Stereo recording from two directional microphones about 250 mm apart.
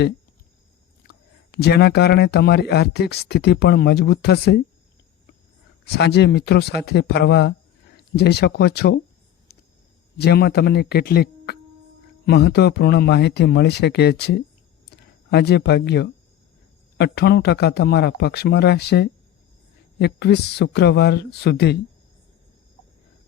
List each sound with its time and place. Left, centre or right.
1.0 s speech: left
6.0 s speech: left
10.2 s speech: left
14.8 s a sound: left
17.0 s speech: left